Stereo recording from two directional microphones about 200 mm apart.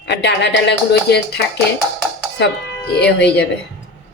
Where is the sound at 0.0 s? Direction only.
60° left (ahead or behind).